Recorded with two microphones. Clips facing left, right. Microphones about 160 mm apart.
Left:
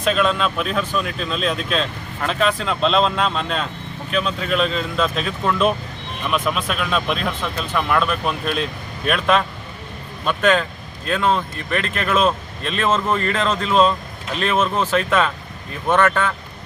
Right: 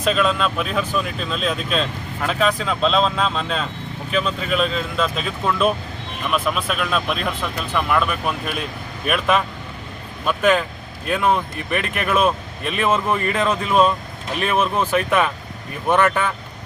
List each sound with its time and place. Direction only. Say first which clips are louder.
0.0 s speech: even; centre (ahead or behind)